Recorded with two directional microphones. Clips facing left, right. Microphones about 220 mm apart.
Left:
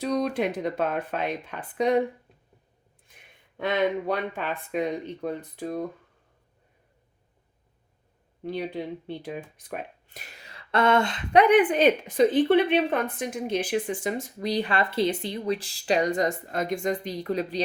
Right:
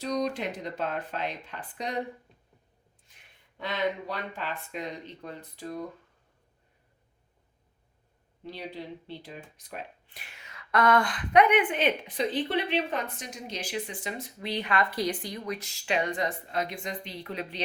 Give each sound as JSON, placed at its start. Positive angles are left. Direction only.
{"t": 0.0, "sound": "speech", "side_deg": 55}
{"t": 3.1, "sound": "a sound", "side_deg": 55}
{"t": 3.6, "sound": "speech", "side_deg": 55}
{"t": 8.4, "sound": "speech", "side_deg": 55}